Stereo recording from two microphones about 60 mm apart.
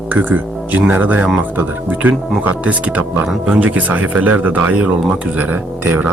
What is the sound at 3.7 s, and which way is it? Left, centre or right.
Speech, right.